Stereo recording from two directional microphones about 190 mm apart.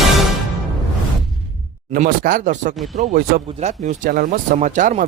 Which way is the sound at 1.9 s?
45° right (ahead or behind).